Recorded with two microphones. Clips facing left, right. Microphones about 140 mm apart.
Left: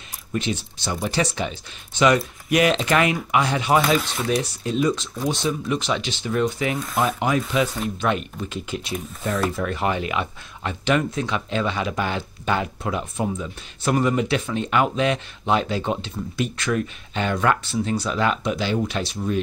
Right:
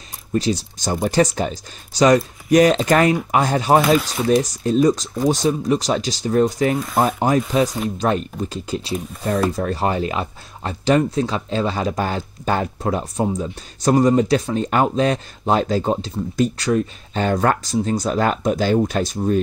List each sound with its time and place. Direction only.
0.3 s speech: 35° right (ahead or behind)
6.7 s speech: centre (ahead or behind)
7.2 s speech: 40° right (ahead or behind)